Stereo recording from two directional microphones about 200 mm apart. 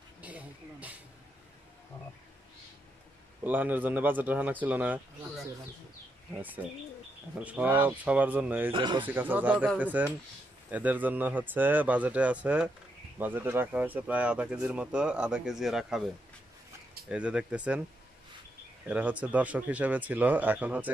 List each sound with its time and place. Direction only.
0.2 s a sound: 5° right (ahead or behind)
3.4 s speech: 10° right (ahead or behind)
6.3 s speech: 10° right (ahead or behind)
8.7 s speech: 20° right (ahead or behind)
9.0 s speech: 10° right (ahead or behind)
17.1 s speech: 5° right (ahead or behind)
18.9 s speech: 5° right (ahead or behind)